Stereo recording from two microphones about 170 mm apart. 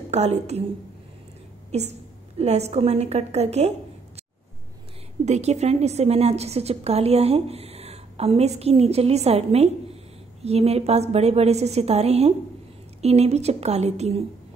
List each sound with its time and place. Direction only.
0.1 s a woman's voice: 40° right (ahead or behind)
1.7 s a woman's voice: 40° right (ahead or behind)
5.2 s a woman's voice: 40° right (ahead or behind)